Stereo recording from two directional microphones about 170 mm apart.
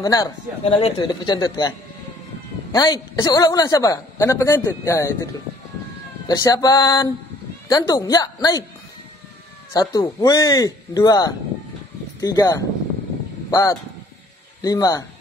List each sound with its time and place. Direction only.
0.0 s a woman's voice: 20° left (ahead or behind)
0.7 s a woman's voice: 35° left (ahead or behind)
2.7 s a woman's voice: 25° left (ahead or behind)
9.7 s a woman's voice: 20° left (ahead or behind)